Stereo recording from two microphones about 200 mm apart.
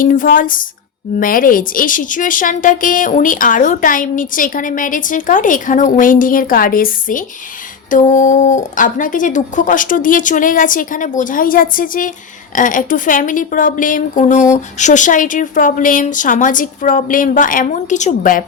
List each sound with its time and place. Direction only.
0.0 s a woman's voice: 40° left (ahead or behind)